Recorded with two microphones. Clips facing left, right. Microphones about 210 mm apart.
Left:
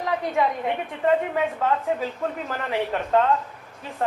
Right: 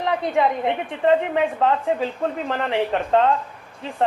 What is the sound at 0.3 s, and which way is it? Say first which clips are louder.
Speech: right 4 dB; 30° right (ahead or behind).